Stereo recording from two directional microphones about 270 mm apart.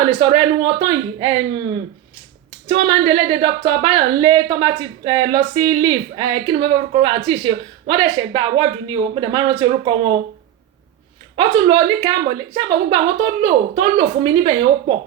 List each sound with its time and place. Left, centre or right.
0.2 s a woman's voice: centre
11.3 s a woman's voice: centre